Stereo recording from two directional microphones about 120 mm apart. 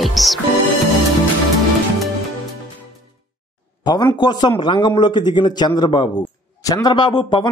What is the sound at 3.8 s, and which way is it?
A man's voice, 35° left (ahead or behind).